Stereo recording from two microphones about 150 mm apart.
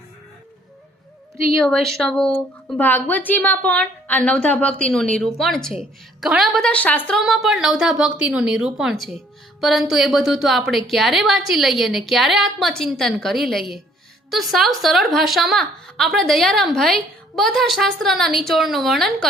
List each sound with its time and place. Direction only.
1.5 s a woman's voice: 5° left (ahead or behind)